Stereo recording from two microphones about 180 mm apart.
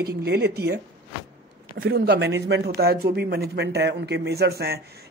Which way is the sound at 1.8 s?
60° right (ahead or behind).